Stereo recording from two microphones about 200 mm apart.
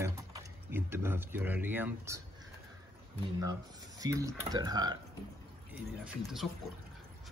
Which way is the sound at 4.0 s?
15° right (ahead or behind).